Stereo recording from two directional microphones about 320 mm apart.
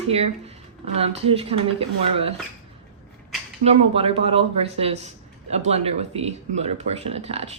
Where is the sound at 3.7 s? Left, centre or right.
Centre.